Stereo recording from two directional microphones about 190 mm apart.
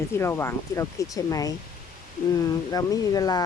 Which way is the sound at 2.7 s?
20° left (ahead or behind).